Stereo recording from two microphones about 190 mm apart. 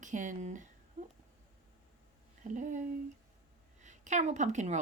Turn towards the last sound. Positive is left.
turn(degrees=-40)  # may be behind; listen again after turning